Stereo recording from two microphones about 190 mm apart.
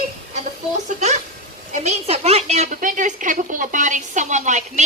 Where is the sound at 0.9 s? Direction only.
40° right (ahead or behind).